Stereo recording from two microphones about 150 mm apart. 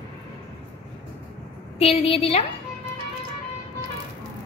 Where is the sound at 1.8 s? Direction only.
45° left (ahead or behind).